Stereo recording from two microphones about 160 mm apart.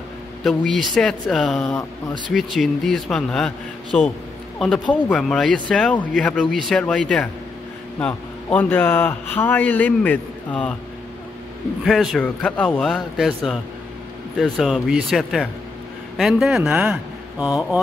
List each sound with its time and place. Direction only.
0.4 s a man's voice: centre (ahead or behind)
11.8 s a man's voice: centre (ahead or behind)